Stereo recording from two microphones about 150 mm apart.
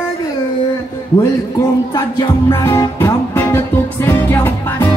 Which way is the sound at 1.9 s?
20° left (ahead or behind).